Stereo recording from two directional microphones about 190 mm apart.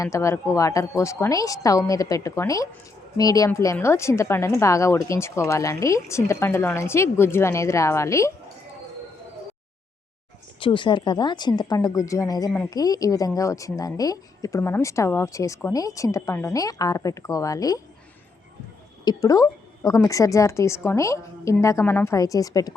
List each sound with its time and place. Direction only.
0.0 s a woman's voice: 15° left (ahead or behind)
10.6 s a woman's voice: 25° left (ahead or behind)
19.0 s a woman's voice: 20° left (ahead or behind)